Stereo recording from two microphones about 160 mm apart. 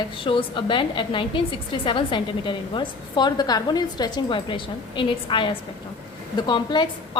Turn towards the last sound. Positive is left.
turn(degrees=30)  # may be behind; listen again after turning